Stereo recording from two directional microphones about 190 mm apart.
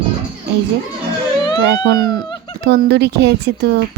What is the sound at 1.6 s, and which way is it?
Speech, 70° right (ahead or behind).